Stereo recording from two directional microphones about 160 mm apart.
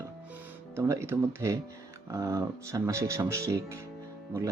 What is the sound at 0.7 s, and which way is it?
Speech, 15° right (ahead or behind).